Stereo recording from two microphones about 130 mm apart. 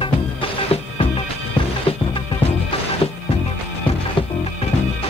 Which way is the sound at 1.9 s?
45° left (ahead or behind).